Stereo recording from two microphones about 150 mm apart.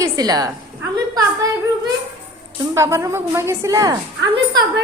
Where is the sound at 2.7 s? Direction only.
20° right (ahead or behind).